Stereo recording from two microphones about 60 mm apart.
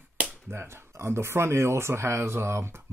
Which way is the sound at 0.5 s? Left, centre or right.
Right.